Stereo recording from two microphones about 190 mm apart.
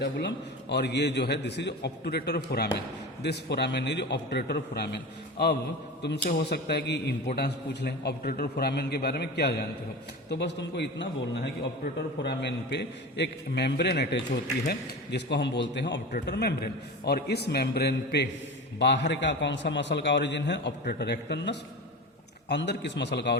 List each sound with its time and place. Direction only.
0.0 s a man's voice: 60° left (ahead or behind)
6.0 s a man's voice: 60° left (ahead or behind)